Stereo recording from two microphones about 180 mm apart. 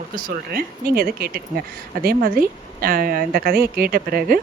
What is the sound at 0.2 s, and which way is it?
Speech, 55° right (ahead or behind).